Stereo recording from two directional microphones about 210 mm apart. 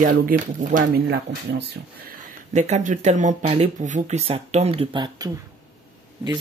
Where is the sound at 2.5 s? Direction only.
35° right (ahead or behind).